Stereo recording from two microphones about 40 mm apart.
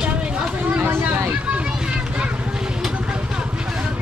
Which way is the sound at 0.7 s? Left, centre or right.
Right.